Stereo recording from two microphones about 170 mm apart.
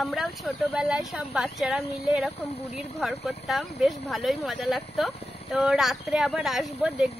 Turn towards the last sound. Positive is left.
turn(degrees=0)  # may be behind; listen again after turning